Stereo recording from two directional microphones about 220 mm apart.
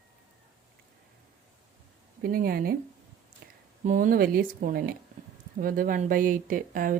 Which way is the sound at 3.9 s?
35° right (ahead or behind).